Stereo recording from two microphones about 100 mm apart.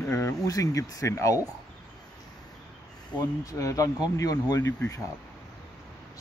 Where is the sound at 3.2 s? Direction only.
35° left (ahead or behind).